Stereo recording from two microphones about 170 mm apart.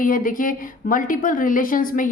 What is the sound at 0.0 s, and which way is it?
A woman's voice, 50° left (ahead or behind).